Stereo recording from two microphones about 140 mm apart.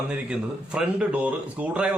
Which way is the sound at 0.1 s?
5° right (ahead or behind).